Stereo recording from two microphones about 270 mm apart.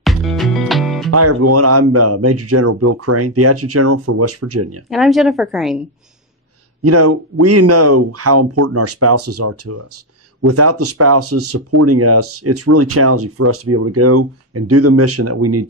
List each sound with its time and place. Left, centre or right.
0.0 s music: centre
1.1 s speech: right
4.8 s a woman's voice: centre
6.8 s speech: right